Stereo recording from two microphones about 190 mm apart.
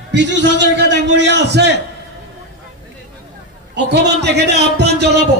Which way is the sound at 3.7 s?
65° right (ahead or behind).